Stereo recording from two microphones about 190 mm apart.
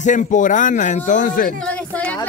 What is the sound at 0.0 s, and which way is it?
Speech, 40° left (ahead or behind).